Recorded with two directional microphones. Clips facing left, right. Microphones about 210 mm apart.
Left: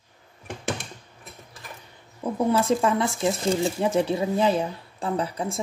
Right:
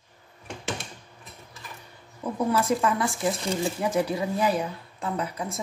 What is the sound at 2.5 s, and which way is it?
Speech, 25° left (ahead or behind).